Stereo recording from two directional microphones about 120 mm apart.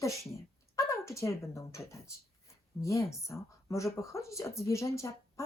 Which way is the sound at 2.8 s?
25° left (ahead or behind).